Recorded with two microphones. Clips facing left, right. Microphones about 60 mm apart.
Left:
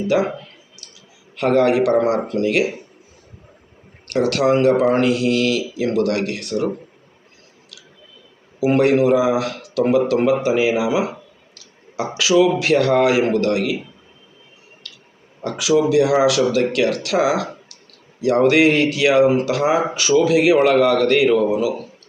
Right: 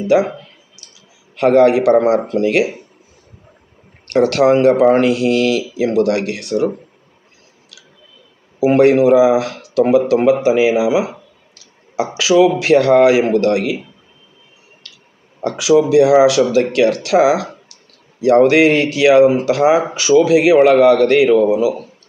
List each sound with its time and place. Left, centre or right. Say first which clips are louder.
1.4 s speech: right 5 dB; right
4.1 s speech: right 5 dB; right
8.6 s speech: right 4 dB; right
15.4 s speech: right 4 dB; right